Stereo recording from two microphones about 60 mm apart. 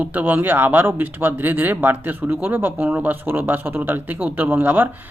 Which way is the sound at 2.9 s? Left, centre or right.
Right.